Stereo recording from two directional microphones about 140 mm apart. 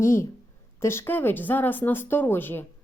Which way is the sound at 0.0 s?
20° left (ahead or behind).